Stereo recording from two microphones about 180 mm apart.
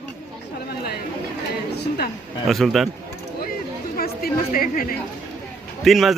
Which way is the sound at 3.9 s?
55° left (ahead or behind).